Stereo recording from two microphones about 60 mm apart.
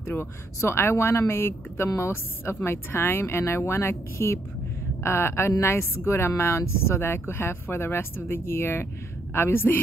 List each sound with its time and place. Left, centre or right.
0.0 s a man's voice: left